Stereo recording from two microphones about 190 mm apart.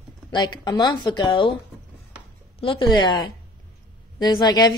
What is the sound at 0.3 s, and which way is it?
Speech, 20° left (ahead or behind).